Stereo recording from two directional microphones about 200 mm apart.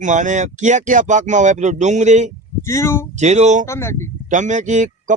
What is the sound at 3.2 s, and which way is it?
Speech, 35° right (ahead or behind).